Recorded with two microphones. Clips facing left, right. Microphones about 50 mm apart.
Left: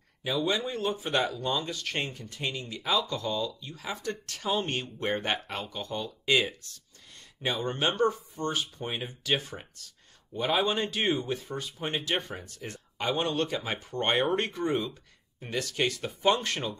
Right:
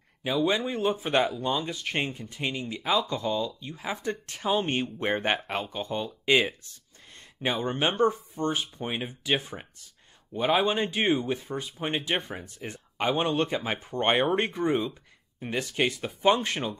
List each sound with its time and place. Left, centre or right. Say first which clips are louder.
0.2 s speech: right 3 dB; centre
3.6 s speech: right 3 dB; right
14.6 s speech: right 3 dB; centre
15.4 s speech: right 2 dB; right